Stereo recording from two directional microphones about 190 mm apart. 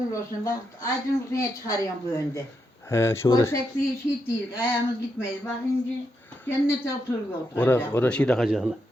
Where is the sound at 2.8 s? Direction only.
15° left (ahead or behind).